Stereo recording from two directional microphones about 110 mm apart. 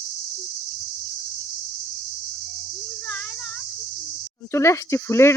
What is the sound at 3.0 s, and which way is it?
Insect, 10° left (ahead or behind).